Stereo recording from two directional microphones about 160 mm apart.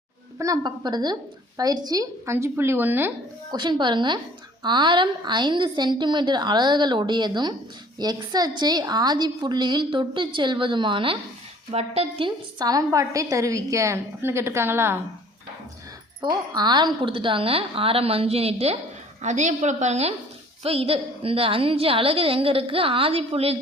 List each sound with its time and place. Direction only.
0.3 s a woman's voice: 20° right (ahead or behind)
3.5 s a woman's voice: 25° right (ahead or behind)
16.3 s a woman's voice: 25° right (ahead or behind)